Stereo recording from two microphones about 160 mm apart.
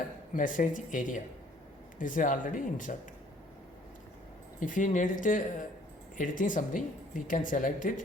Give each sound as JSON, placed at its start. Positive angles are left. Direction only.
{"t": 0.3, "sound": "a woman's voice", "side_deg": 55}
{"t": 4.6, "sound": "a woman's voice", "side_deg": 55}